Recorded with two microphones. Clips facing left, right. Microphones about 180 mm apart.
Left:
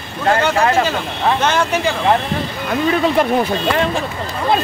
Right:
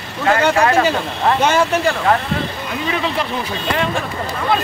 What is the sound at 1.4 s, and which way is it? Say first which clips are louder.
Speech: right 4 dB; 10° right (ahead or behind).